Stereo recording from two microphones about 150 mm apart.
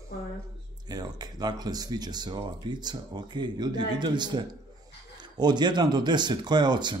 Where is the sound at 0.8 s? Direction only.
25° right (ahead or behind).